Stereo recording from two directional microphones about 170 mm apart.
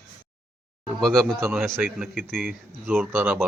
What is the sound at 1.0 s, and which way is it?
Speech, centre (ahead or behind).